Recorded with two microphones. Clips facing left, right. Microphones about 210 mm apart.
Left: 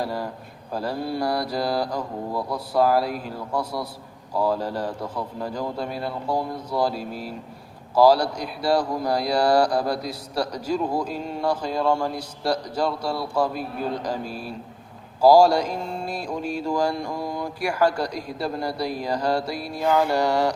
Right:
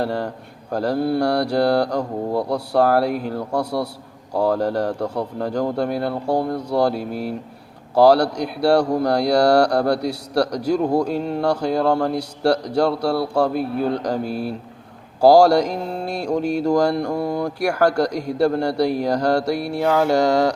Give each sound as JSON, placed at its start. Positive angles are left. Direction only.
{"t": 0.0, "sound": "speech", "side_deg": -70}